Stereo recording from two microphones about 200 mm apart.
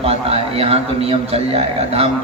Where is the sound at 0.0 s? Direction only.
30° right (ahead or behind).